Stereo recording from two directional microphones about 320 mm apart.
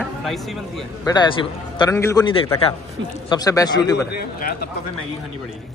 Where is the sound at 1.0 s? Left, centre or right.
Centre.